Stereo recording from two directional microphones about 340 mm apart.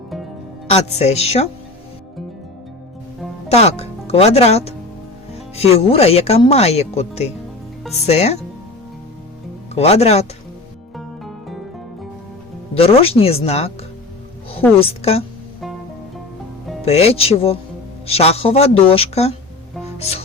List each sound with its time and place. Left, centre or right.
0.7 s speech: centre
3.5 s speech: centre
9.7 s speech: centre
10.9 s music: centre
12.7 s speech: centre
14.8 s speech: centre
16.8 s speech: centre